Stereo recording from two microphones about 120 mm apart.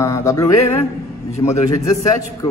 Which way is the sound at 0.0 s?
25° left (ahead or behind).